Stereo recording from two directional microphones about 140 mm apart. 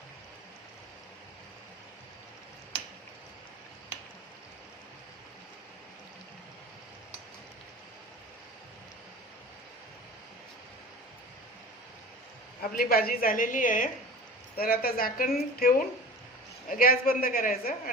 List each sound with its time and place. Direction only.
12.7 s a woman's voice: 90° left; by 13.9 s 75° left (ahead or behind)
14.5 s a woman's voice: 90° left